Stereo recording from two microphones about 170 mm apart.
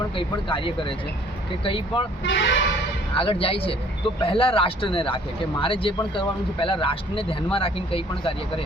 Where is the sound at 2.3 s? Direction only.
90° left.